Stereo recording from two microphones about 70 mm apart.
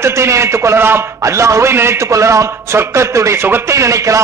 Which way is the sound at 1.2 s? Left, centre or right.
Right.